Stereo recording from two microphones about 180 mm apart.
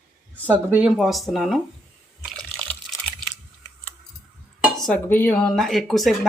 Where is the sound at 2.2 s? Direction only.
Centre (ahead or behind).